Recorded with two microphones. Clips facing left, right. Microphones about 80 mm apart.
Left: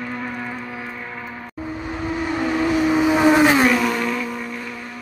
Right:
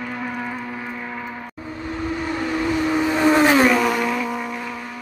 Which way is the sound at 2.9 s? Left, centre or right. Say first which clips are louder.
Left 2 dB; centre.